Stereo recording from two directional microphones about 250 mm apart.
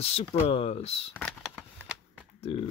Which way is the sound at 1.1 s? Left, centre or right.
Centre.